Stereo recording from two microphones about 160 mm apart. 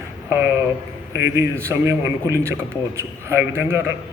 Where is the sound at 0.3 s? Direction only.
15° right (ahead or behind).